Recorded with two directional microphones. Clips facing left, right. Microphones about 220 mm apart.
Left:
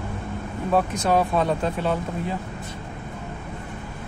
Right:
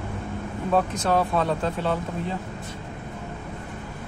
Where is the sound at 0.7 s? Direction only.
10° left (ahead or behind).